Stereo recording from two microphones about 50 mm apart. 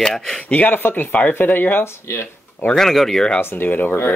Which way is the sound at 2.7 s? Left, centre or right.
Centre.